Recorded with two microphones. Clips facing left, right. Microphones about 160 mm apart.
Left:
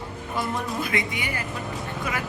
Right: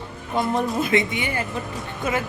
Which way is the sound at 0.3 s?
20° right (ahead or behind).